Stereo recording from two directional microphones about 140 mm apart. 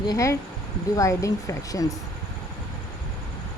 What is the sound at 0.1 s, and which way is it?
Speech, 20° left (ahead or behind).